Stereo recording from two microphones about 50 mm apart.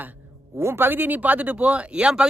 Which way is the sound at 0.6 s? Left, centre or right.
Right.